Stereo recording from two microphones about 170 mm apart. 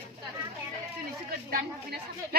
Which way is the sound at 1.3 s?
60° right (ahead or behind).